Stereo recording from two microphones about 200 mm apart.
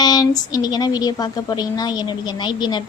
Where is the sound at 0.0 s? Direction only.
20° left (ahead or behind).